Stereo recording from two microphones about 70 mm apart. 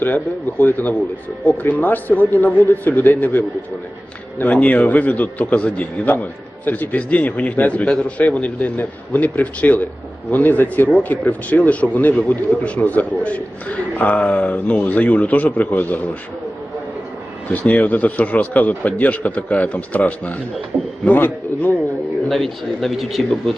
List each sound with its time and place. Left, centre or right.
0.6 s a man's voice: left
17.5 s a man's voice: left
22.3 s a man's voice: centre